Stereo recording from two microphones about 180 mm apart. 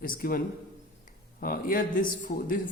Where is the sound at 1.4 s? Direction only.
50° left (ahead or behind).